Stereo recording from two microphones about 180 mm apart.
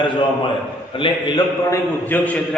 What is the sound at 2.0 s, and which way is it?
Speech, 10° left (ahead or behind).